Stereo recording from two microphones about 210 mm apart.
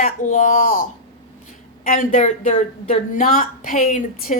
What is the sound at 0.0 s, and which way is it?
Speech, 40° left (ahead or behind).